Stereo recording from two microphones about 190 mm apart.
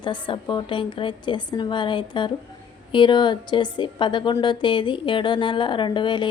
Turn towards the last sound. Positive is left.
turn(degrees=25)  # may be behind; listen again after turning